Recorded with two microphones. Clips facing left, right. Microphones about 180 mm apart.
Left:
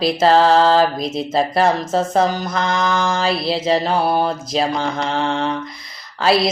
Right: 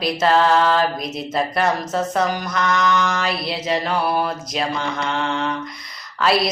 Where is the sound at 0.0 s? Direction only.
30° left (ahead or behind).